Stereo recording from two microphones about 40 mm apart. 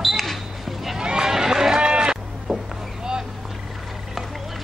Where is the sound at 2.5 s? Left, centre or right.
Centre.